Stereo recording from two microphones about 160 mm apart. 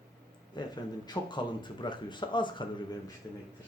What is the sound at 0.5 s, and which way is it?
Speech, 25° left (ahead or behind).